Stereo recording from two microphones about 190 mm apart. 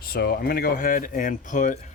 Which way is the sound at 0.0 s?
55° left (ahead or behind).